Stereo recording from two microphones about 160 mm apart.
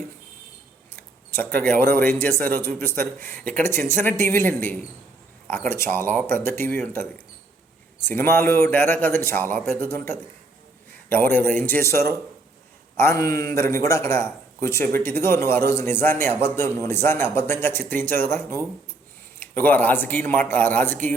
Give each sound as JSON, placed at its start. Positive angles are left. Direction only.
{"t": 0.9, "sound": "a man's voice", "side_deg": 10}